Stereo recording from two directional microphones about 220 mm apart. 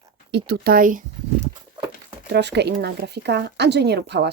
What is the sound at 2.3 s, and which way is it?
Speech, 50° right (ahead or behind).